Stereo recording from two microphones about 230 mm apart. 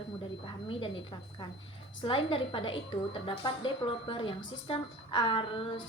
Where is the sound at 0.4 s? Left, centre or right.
Left.